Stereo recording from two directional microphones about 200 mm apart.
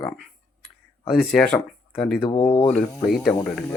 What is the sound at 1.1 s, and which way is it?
Speech, centre (ahead or behind).